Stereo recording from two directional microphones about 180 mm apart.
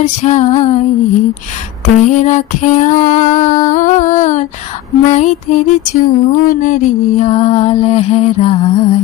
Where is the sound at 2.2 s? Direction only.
40° left (ahead or behind).